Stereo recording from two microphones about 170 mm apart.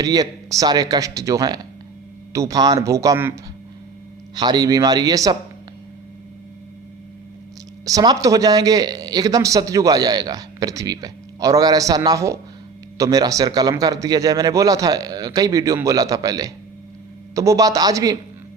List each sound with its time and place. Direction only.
0.0 s speech: 20° right (ahead or behind)
4.4 s speech: 25° right (ahead or behind)
7.9 s speech: 20° right (ahead or behind)